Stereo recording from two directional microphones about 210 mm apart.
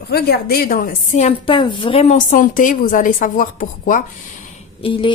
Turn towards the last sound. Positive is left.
turn(degrees=25)  # may be behind; listen again after turning